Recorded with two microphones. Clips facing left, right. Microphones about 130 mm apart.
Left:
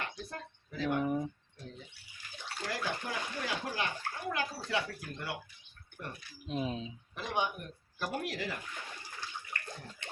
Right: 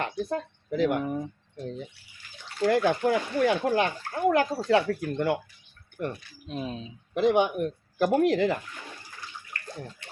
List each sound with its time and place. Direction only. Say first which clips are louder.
0.0 s a sound: right 12 dB; 90° right
1.0 s speech: right 2 dB; 5° left (ahead or behind)
1.5 s speech: right 13 dB; 75° right (ahead or behind)
6.5 s speech: right 1 dB; 20° left (ahead or behind)
7.1 s speech: right 13 dB; 65° right (ahead or behind)